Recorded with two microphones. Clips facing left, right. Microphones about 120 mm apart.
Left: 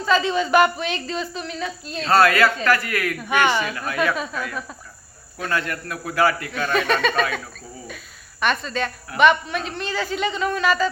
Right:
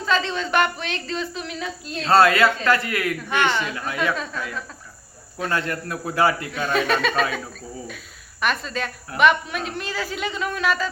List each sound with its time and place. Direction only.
0.0 s a woman's voice: 5° left (ahead or behind)
2.0 s a man's voice: 25° right (ahead or behind)
3.2 s speech: 10° left (ahead or behind)
5.5 s a man's voice: 30° right (ahead or behind)
6.5 s a woman's voice: centre (ahead or behind)